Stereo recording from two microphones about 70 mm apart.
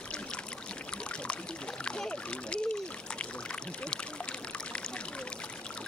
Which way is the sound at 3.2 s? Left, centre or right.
Centre.